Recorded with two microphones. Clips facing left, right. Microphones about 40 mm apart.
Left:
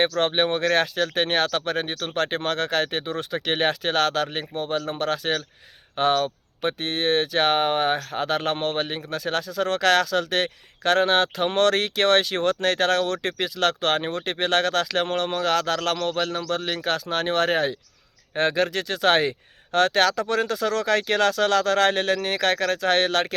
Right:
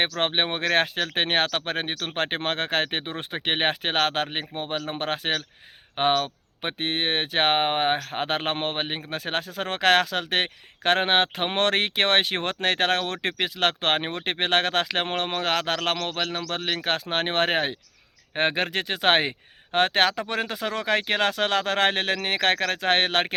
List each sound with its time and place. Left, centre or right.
0.2 s speech: right